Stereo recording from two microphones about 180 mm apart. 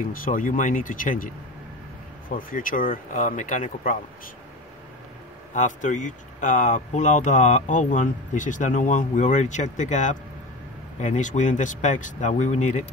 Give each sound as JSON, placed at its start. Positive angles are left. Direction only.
{"t": 0.0, "sound": "speech", "side_deg": 50}
{"t": 5.5, "sound": "speech", "side_deg": 45}